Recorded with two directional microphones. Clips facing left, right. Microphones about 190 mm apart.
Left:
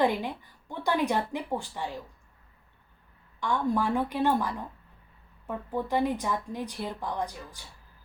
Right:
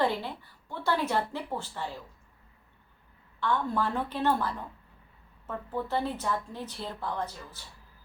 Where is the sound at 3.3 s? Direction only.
15° left (ahead or behind).